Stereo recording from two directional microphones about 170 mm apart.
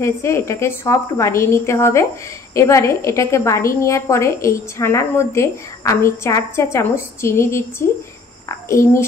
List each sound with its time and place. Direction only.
0.0 s a woman's voice: 15° left (ahead or behind)